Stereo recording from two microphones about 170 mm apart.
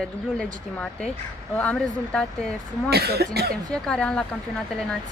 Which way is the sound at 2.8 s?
70° right (ahead or behind).